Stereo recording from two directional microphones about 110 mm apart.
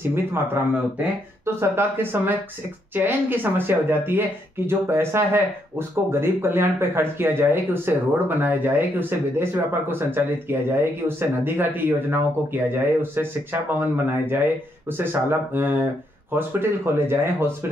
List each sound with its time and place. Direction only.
1.4 s speech: 20° right (ahead or behind)
15.5 s speech: 20° right (ahead or behind)